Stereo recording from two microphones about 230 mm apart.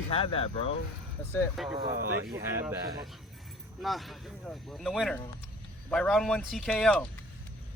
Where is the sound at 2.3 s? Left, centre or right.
Centre.